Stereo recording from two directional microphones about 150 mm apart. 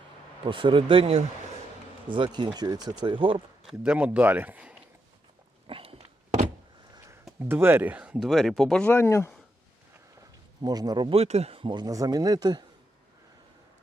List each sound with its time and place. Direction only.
0.4 s speech: 35° right (ahead or behind)
3.7 s speech: 10° right (ahead or behind)
5.6 s dog: 40° right (ahead or behind)
7.3 s speech: 15° right (ahead or behind); by 8.9 s centre (ahead or behind)
8.9 s speech: 15° left (ahead or behind)
10.6 s speech: 25° right (ahead or behind)